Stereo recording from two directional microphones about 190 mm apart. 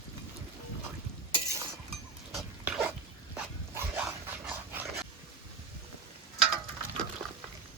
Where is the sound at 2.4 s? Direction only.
5° right (ahead or behind).